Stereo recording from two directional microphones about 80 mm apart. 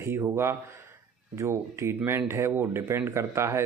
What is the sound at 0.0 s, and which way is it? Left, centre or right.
Speech, right.